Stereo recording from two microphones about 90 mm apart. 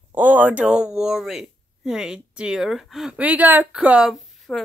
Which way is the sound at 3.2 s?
15° right (ahead or behind).